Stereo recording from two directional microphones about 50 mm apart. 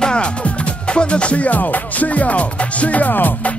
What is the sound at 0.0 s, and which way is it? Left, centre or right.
Music, left.